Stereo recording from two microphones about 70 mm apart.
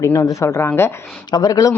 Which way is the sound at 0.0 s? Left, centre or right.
Left.